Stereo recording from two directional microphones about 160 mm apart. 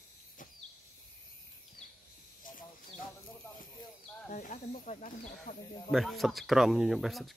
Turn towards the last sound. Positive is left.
turn(degrees=0)  # may be behind; listen again after turning